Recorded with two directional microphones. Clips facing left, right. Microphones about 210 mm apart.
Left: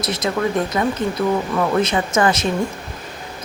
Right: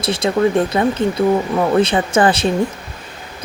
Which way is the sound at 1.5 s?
30° right (ahead or behind).